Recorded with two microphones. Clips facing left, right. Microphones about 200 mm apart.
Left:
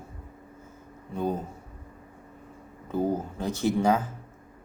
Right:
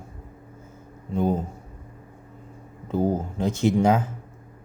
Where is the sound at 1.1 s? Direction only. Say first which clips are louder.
Right 5 dB; 20° right (ahead or behind).